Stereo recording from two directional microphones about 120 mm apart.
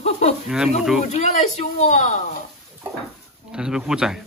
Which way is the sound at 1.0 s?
65° left (ahead or behind).